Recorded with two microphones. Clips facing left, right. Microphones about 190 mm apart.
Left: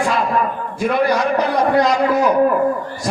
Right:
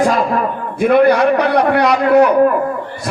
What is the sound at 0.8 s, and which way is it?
A man's voice, 60° right (ahead or behind).